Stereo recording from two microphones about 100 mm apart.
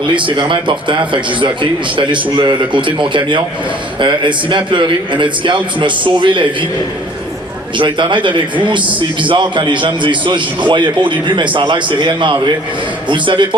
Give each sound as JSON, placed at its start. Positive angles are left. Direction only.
{"t": 0.3, "sound": "a man's voice", "side_deg": -55}
{"t": 7.8, "sound": "a man's voice", "side_deg": -55}